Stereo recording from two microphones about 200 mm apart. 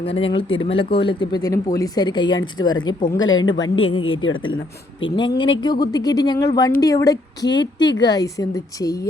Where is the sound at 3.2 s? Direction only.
75° left (ahead or behind).